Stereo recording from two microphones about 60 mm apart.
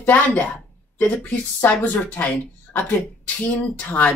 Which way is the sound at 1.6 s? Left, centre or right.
Left.